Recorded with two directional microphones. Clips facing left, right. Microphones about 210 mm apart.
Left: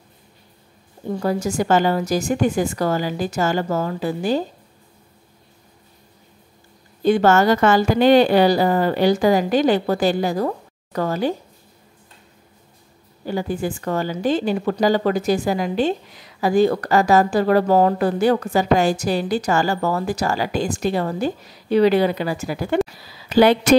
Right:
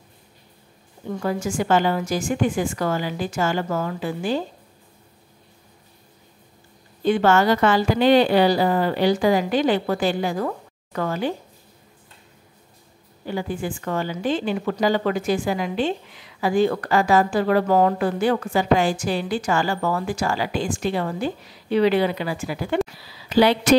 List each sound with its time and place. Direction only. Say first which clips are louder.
1.0 s a woman's voice: left 3 dB; 35° left (ahead or behind)
7.0 s a woman's voice: left 3 dB; 40° left (ahead or behind)
13.2 s a woman's voice: left 3 dB; 40° left (ahead or behind)